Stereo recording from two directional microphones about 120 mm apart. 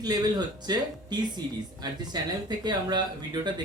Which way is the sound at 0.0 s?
35° right (ahead or behind).